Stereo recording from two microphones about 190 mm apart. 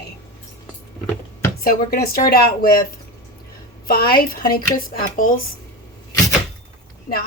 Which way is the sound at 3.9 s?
50° left (ahead or behind).